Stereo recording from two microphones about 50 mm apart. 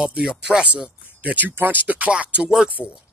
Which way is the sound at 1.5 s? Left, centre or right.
Right.